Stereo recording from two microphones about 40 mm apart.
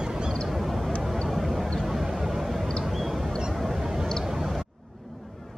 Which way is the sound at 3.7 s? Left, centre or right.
Centre.